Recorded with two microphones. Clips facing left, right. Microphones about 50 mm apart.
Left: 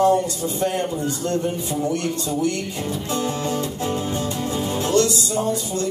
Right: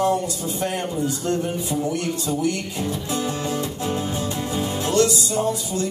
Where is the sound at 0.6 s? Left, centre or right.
Centre.